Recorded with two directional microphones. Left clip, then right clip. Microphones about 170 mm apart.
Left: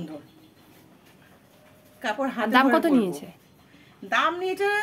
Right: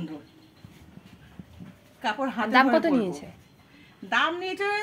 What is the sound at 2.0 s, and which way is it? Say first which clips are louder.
A woman's voice: left 1 dB; 20° left (ahead or behind).